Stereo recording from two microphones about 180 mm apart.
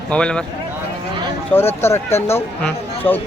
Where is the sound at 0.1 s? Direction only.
5° left (ahead or behind).